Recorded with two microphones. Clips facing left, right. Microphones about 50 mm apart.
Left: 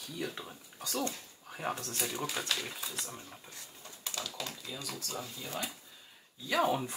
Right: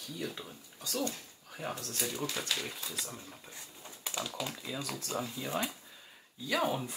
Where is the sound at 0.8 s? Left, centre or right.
Left.